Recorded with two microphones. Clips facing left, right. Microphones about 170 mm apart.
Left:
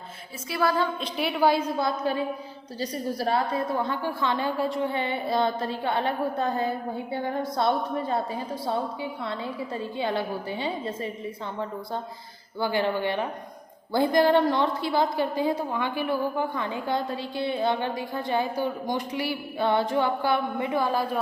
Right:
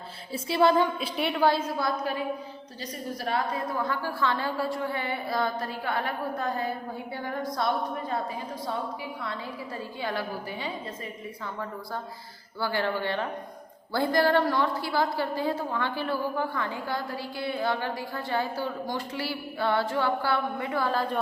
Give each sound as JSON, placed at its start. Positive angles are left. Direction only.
{"t": 0.4, "sound": "a sound", "side_deg": -25}
{"t": 1.0, "sound": "a woman's voice", "side_deg": 0}
{"t": 2.8, "sound": "a woman's voice", "side_deg": 35}
{"t": 10.0, "sound": "a woman's voice", "side_deg": 25}
{"t": 12.5, "sound": "a woman's voice", "side_deg": 20}